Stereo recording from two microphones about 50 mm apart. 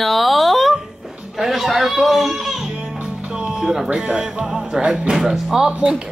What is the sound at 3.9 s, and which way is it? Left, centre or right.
Speech, centre.